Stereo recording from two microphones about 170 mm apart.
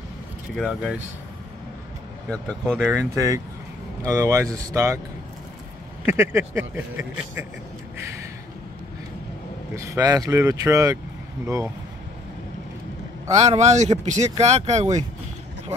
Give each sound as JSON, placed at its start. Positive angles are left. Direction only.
{"t": 0.6, "sound": "speech", "side_deg": 0}
{"t": 2.2, "sound": "speech", "side_deg": 5}
{"t": 3.0, "sound": "speech", "side_deg": -20}
{"t": 6.0, "sound": "speech", "side_deg": -15}
{"t": 9.8, "sound": "speech", "side_deg": -20}
{"t": 13.4, "sound": "speech", "side_deg": -40}